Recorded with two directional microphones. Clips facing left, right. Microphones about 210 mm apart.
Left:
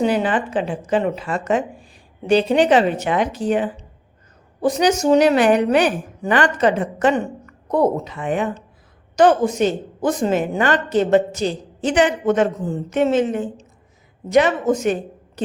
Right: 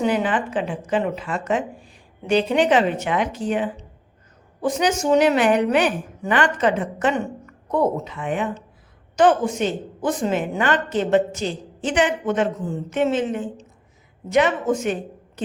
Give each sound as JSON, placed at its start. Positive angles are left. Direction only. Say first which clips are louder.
{"t": 0.0, "sound": "a woman's voice", "louder": "left 2 dB", "side_deg": 35}